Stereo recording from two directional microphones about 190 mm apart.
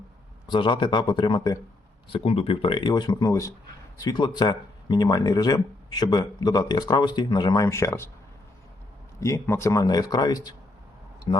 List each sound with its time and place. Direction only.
0.5 s speech: 25° left (ahead or behind)
9.2 s speech: 15° left (ahead or behind)